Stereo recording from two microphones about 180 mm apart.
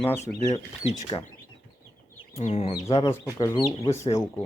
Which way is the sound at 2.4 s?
40° left (ahead or behind).